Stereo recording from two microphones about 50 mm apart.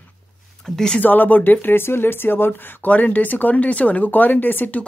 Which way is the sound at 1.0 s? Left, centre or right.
Left.